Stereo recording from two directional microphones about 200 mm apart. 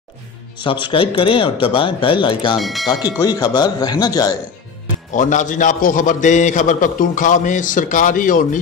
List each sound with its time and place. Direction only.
0.6 s speech: 25° left (ahead or behind)
2.6 s speech: centre (ahead or behind)
3.2 s speech: 20° left (ahead or behind)
5.1 s a man's voice: 40° left (ahead or behind)